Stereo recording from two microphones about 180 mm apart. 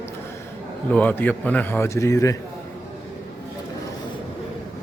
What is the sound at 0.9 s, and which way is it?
Speech, 10° left (ahead or behind).